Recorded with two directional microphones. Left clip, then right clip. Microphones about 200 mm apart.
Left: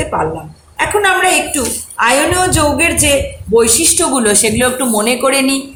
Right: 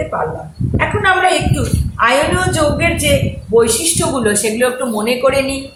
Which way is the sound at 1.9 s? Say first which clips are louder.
Left 1 dB; 45° left (ahead or behind).